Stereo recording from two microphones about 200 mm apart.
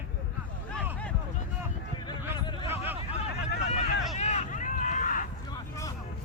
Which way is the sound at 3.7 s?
35° left (ahead or behind).